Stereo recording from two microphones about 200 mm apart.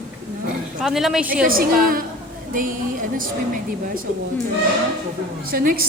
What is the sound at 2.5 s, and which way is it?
A woman's voice, 45° right (ahead or behind).